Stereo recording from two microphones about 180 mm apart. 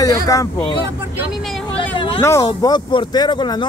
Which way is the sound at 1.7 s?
30° left (ahead or behind).